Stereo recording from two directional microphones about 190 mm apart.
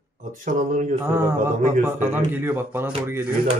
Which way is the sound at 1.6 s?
40° right (ahead or behind).